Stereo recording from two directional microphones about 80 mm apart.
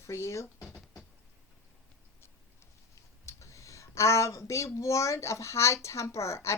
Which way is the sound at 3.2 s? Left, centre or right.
Left.